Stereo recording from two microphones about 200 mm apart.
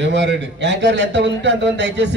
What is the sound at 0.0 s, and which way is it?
A man's voice, 60° right (ahead or behind).